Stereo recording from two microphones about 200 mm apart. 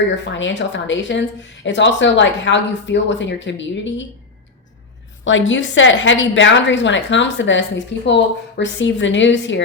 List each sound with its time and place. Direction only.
0.1 s speech: 65° left (ahead or behind)
5.2 s a woman's voice: 70° left (ahead or behind)